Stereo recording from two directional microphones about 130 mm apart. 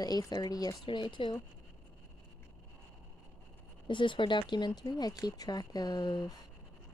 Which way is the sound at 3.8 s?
40° left (ahead or behind).